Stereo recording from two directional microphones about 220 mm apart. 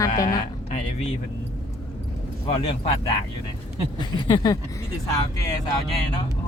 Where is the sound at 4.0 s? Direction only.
20° left (ahead or behind).